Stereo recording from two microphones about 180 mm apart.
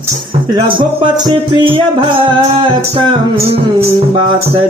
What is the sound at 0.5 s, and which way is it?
Speech, 25° right (ahead or behind).